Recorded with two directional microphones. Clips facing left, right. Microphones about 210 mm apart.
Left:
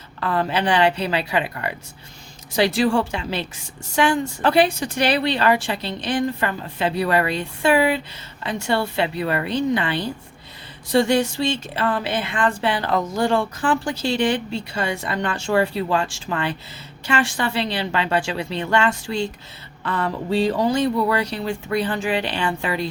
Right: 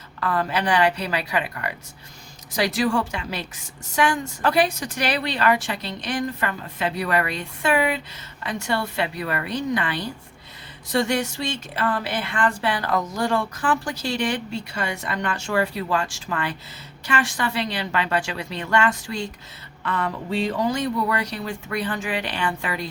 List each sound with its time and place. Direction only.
0.2 s speech: 25° left (ahead or behind)